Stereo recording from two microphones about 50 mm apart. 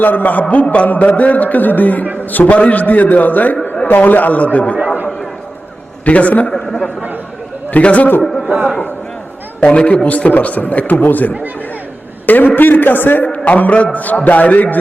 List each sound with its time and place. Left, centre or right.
0.0 s a man's voice: left
6.1 s a man's voice: left
6.5 s speech: centre
7.7 s a man's voice: left
8.2 s a sound: centre
9.6 s a man's voice: left
13.2 s a man's voice: left